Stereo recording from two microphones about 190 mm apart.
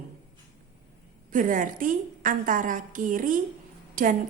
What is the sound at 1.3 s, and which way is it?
A woman's voice, 45° right (ahead or behind).